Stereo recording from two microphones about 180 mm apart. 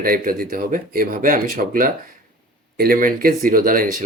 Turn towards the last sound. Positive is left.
turn(degrees=-50)  # may be behind; listen again after turning